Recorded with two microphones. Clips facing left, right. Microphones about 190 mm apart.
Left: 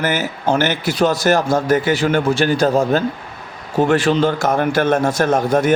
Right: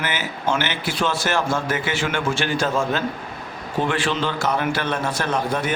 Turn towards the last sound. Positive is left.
turn(degrees=45)  # may be behind; listen again after turning